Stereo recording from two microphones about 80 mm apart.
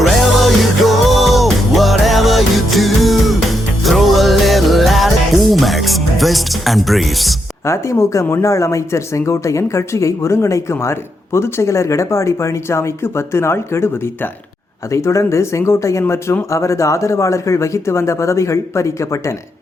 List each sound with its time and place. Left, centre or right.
0.0 s music: centre
7.7 s speech: left
14.9 s speech: left